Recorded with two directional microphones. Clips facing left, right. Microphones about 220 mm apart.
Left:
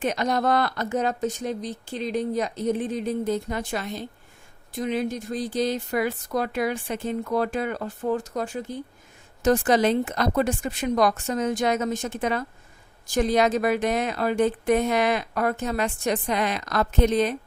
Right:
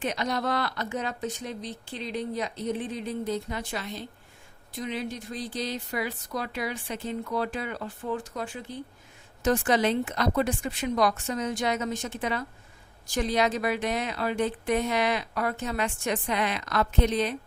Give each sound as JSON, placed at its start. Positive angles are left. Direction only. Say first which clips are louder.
{"t": 0.0, "sound": "a woman's voice", "louder": "left 5 dB", "side_deg": 45}